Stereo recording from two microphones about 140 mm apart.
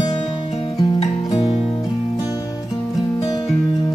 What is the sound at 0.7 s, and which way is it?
Music, 30° left (ahead or behind).